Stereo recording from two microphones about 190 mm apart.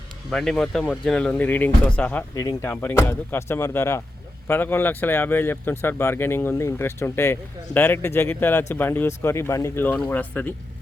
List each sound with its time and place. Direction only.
0.3 s speech: centre (ahead or behind)